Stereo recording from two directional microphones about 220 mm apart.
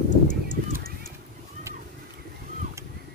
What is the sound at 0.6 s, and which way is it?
Clip-clop, 40° right (ahead or behind).